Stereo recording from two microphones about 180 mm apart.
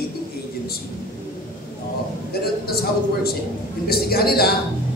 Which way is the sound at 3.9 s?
60° left (ahead or behind).